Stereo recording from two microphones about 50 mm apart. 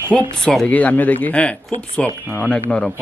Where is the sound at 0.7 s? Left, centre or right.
Left.